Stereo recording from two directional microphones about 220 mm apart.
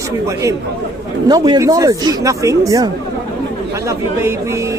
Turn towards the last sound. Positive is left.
turn(degrees=-10)  # may be behind; listen again after turning